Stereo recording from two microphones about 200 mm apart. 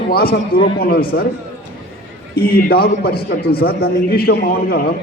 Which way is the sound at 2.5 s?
50° left (ahead or behind).